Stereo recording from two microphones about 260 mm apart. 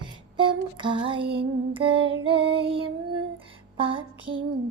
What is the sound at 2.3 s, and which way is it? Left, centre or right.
Child singing, centre.